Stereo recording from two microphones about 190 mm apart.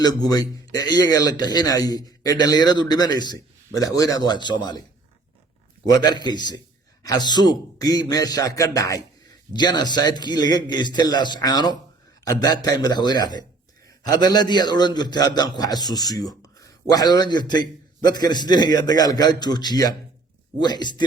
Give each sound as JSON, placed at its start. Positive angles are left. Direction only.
{"t": 0.0, "sound": "a man's voice", "side_deg": 20}
{"t": 5.8, "sound": "a man's voice", "side_deg": 20}